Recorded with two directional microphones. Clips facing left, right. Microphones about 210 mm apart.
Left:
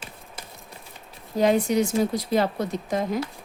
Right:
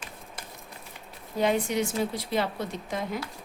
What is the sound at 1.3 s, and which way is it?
Speech, 40° left (ahead or behind).